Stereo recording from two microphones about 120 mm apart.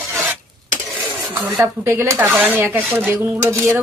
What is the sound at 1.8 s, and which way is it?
Speech, 20° right (ahead or behind).